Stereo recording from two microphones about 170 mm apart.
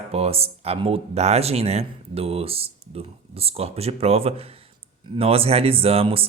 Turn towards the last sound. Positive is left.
turn(degrees=-35)  # may be behind; listen again after turning